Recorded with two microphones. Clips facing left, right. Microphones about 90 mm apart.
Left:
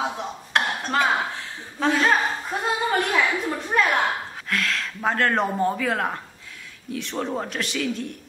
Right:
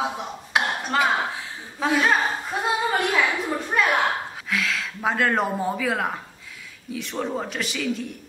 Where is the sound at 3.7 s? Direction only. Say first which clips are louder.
Even; 5° right (ahead or behind).